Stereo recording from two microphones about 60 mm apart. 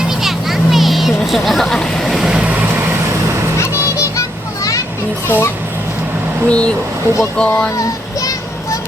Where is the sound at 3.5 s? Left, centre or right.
Left.